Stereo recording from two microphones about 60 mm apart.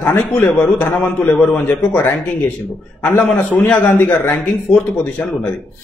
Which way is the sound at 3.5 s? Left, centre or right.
Left.